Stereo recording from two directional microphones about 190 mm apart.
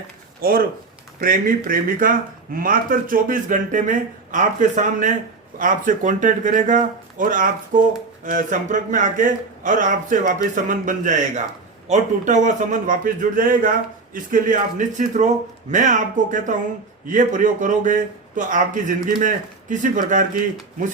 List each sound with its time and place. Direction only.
0.4 s speech: 50° right (ahead or behind)